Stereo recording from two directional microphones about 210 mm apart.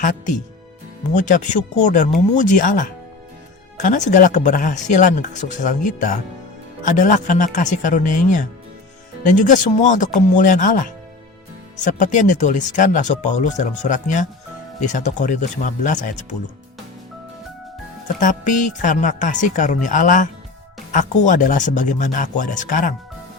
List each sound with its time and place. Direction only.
1.1 s speech: 35° left (ahead or behind)
11.9 s speech: 35° left (ahead or behind)
18.2 s speech: 35° left (ahead or behind)